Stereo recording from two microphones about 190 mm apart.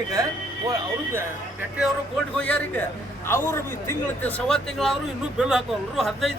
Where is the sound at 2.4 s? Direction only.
10° left (ahead or behind).